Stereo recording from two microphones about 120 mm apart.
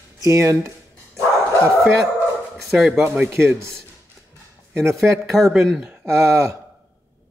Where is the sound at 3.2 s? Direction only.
20° right (ahead or behind).